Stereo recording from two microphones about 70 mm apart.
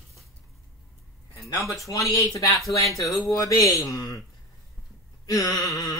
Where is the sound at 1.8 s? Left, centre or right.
Left.